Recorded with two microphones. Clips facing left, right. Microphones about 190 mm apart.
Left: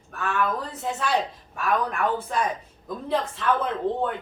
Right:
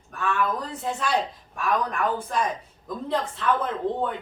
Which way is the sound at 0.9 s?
5° left (ahead or behind).